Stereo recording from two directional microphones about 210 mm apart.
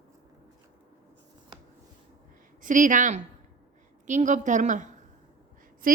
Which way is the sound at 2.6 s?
40° right (ahead or behind).